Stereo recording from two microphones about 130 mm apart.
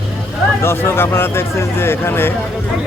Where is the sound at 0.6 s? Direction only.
20° left (ahead or behind).